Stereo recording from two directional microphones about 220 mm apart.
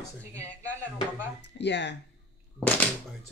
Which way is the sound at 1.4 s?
55° left (ahead or behind).